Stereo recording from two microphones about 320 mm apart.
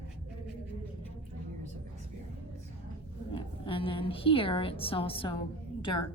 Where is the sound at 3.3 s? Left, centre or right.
Centre.